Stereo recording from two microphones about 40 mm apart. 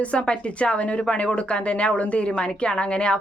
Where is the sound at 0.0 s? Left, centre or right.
Left.